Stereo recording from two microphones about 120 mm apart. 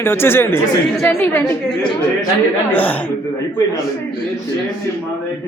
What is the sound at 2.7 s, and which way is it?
Speech, 15° left (ahead or behind).